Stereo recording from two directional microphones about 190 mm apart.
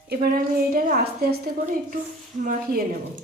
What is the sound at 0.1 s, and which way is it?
A woman's voice, 55° right (ahead or behind).